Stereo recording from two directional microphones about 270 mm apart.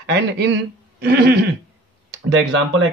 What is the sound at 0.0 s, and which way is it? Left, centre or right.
A man's voice, right.